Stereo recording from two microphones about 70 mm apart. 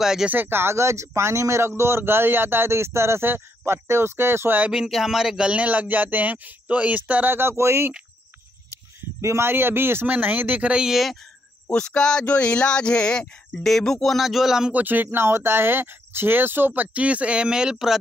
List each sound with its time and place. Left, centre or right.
0.0 s speech: centre
0.3 s speech: right
4.7 s speech: centre
7.2 s speech: right
9.2 s speech: right
10.0 s speech: right
10.9 s speech: centre
11.7 s speech: centre
14.7 s speech: right; by 17.9 s centre